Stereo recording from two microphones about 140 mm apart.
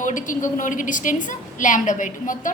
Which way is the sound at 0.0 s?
65° left (ahead or behind).